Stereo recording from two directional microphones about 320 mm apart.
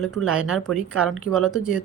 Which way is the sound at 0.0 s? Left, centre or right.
Centre.